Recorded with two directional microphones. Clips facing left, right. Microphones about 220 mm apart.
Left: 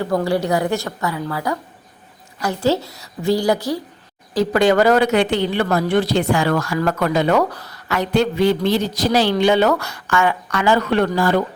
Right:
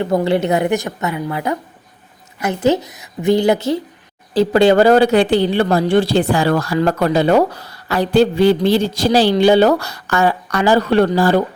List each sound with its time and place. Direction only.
0.0 s a woman's voice: 20° right (ahead or behind)